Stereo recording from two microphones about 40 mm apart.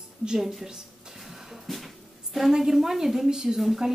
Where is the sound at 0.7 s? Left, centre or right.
Centre.